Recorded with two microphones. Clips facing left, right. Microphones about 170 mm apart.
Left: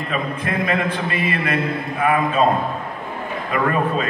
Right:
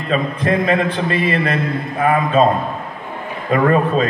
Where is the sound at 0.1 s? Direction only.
30° right (ahead or behind).